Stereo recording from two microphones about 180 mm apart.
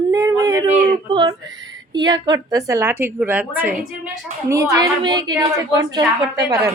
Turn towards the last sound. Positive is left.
turn(degrees=-15)  # may be behind; listen again after turning